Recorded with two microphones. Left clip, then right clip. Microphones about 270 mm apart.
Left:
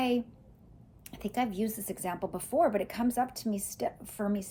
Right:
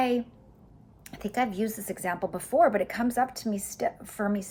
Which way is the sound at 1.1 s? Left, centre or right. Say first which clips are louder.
Right 4 dB; centre.